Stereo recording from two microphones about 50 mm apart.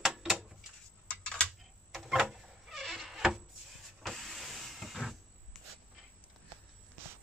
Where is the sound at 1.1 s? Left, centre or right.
Left.